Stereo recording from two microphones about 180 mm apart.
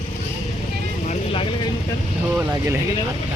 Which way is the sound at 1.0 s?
30° left (ahead or behind).